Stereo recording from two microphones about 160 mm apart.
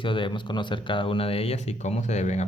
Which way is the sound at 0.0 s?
30° left (ahead or behind).